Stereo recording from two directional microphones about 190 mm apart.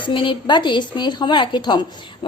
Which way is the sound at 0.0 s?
25° left (ahead or behind).